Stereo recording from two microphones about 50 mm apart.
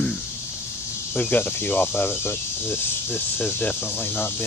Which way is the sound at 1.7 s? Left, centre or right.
Left.